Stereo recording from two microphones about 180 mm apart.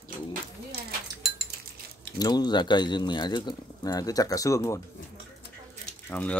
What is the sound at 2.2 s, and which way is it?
Speech, 20° left (ahead or behind).